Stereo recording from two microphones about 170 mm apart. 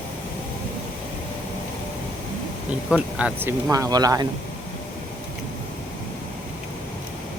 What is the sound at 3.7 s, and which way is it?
Speech, 20° right (ahead or behind).